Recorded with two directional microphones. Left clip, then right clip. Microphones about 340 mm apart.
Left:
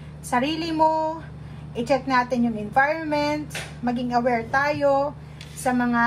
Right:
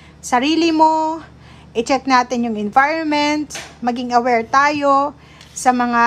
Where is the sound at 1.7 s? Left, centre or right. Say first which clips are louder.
Right 6 dB; right.